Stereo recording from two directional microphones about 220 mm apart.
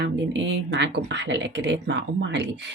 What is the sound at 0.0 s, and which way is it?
Speech, 55° right (ahead or behind).